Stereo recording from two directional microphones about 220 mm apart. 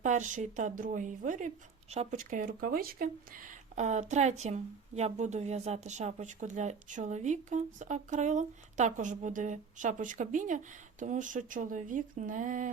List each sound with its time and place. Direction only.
0.0 s speech: 35° right (ahead or behind)